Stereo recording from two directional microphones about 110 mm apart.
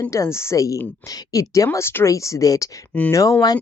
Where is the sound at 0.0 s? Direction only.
30° left (ahead or behind).